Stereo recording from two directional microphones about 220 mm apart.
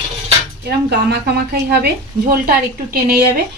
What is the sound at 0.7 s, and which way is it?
Speech, 45° right (ahead or behind).